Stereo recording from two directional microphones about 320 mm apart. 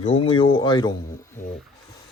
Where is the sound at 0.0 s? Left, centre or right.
Centre.